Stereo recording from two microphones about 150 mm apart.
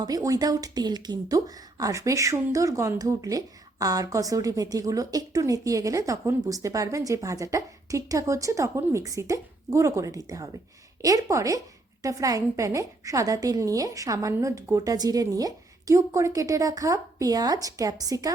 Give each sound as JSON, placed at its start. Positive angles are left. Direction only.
{"t": 0.0, "sound": "speech", "side_deg": -25}